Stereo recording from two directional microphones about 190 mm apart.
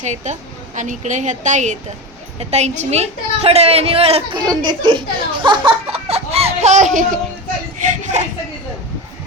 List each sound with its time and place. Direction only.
0.0 s a woman's voice: 40° right (ahead or behind)